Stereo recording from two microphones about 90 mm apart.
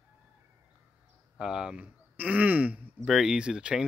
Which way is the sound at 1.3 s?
5° right (ahead or behind).